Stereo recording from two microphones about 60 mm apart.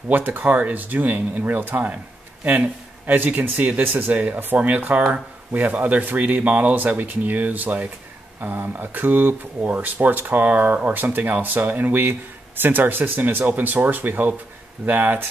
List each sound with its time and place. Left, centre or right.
0.1 s speech: right